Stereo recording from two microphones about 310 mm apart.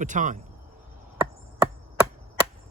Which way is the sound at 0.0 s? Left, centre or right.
Right.